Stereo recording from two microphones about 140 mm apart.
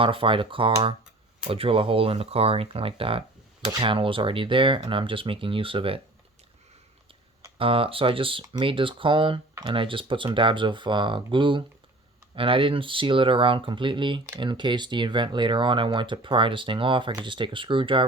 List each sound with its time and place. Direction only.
0.0 s speech: 40° right (ahead or behind)
7.6 s speech: 40° right (ahead or behind)